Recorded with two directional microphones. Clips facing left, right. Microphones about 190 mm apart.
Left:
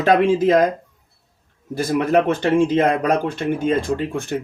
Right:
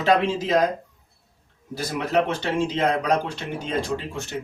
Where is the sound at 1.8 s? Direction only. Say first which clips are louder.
Left 6 dB; 50° left (ahead or behind).